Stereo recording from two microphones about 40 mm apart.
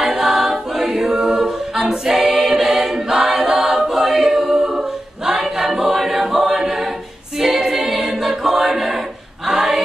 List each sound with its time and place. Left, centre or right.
0.2 s choir: centre
1.9 s a capella: centre
5.4 s choir: centre